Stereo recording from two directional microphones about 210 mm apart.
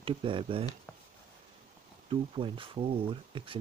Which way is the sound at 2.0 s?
25° right (ahead or behind).